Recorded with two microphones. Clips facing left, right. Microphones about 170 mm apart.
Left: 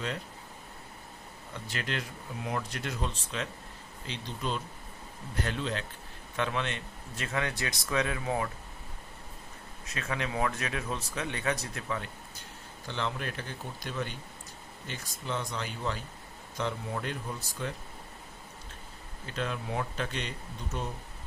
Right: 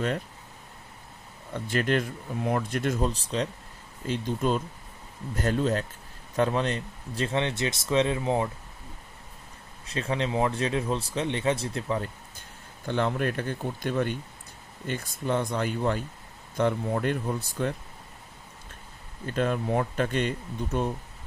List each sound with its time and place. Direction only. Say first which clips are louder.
1.5 s speech: right 10 dB; 50° right (ahead or behind); by 3.5 s 35° right (ahead or behind)
4.0 s speech: right 9 dB; 45° right (ahead or behind); by 8.4 s 25° right (ahead or behind)
9.8 s speech: right 6 dB; 30° right (ahead or behind)
12.8 s speech: right 8 dB; 55° right (ahead or behind)
19.2 s speech: right 8 dB; 50° right (ahead or behind)